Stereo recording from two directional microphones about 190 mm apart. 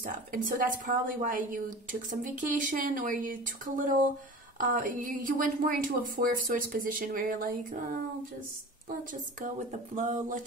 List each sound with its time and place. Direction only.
0.0 s a woman's voice: 45° right (ahead or behind)
9.7 s speech: 40° right (ahead or behind)